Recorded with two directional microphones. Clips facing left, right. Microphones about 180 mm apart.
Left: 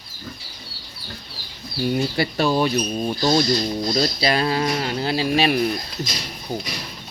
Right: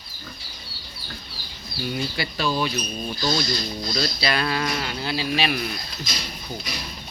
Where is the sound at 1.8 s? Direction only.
45° left (ahead or behind).